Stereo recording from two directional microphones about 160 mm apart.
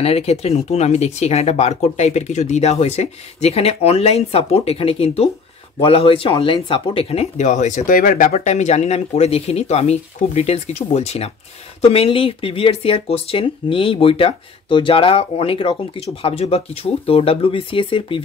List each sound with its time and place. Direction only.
0.0 s speech: 40° left (ahead or behind)